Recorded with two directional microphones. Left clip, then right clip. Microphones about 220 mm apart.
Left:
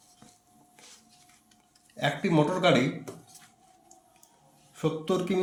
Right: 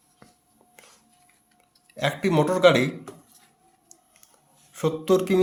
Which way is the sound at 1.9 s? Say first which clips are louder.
Right 3 dB; 35° right (ahead or behind).